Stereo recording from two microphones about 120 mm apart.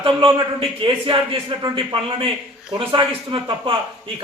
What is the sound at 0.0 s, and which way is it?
A man's voice, 45° right (ahead or behind).